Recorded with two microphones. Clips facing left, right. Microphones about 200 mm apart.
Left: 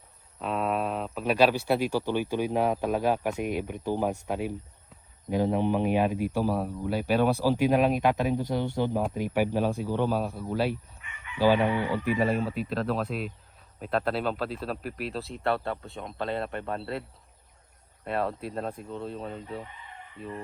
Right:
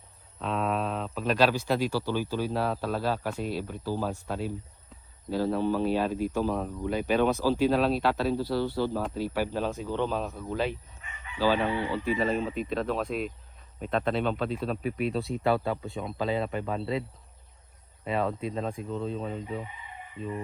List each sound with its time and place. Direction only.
0.3 s a sound: 5° left (ahead or behind)
1.2 s speech: 10° left (ahead or behind)
11.0 s chicken: 35° right (ahead or behind)
11.3 s speech: 15° left (ahead or behind)
18.0 s speech: centre (ahead or behind)